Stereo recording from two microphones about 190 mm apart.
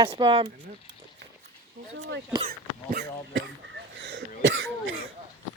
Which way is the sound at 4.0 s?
70° right (ahead or behind).